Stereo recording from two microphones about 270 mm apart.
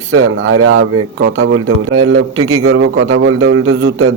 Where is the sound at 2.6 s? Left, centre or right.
Right.